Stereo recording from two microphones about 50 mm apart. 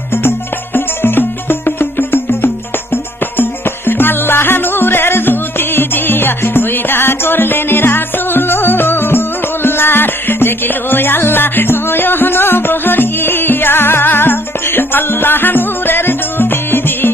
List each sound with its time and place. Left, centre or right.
0.1 s music: left